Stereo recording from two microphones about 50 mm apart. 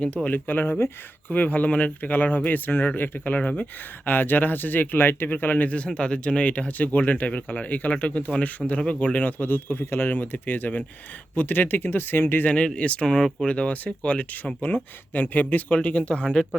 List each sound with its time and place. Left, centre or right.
0.3 s speech: left
10.1 s speech: left
12.5 s speech: left